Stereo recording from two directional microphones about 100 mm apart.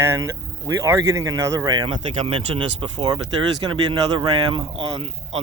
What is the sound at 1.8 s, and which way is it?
Speech, 60° right (ahead or behind).